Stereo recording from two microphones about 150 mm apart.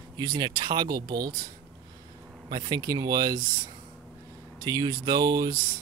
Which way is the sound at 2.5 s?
30° right (ahead or behind).